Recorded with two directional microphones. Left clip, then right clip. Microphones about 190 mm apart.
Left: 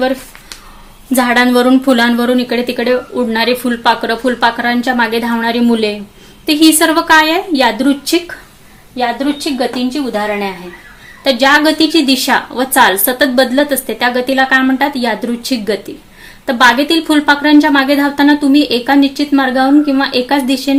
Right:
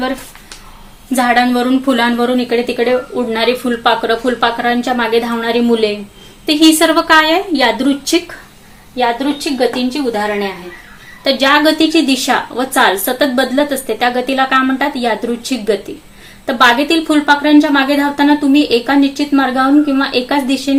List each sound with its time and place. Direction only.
1.1 s a woman's voice: 50° left (ahead or behind)